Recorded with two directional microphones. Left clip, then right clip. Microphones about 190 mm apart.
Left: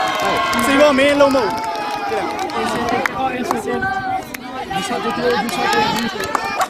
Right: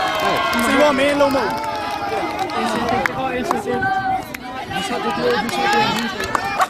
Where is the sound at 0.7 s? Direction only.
50° left (ahead or behind).